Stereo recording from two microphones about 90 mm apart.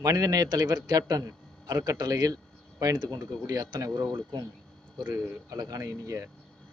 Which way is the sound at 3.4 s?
45° right (ahead or behind).